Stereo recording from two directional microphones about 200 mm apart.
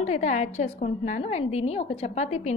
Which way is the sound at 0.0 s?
35° left (ahead or behind).